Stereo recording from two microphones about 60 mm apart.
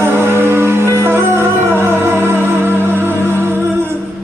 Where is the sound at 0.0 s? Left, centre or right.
Right.